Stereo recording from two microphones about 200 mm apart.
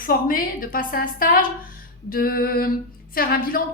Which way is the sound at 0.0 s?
45° left (ahead or behind).